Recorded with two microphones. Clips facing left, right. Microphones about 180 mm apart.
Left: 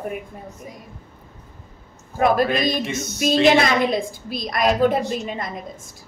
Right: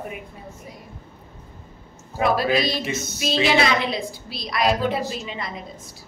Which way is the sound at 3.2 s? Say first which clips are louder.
Left 5 dB; 50° left (ahead or behind).